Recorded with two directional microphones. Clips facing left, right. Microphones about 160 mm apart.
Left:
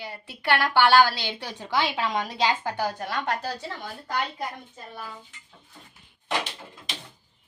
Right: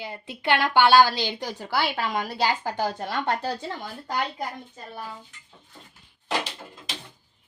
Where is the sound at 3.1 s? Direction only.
30° right (ahead or behind).